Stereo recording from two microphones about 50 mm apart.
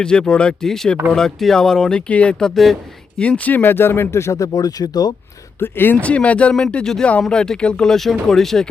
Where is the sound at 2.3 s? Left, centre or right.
Centre.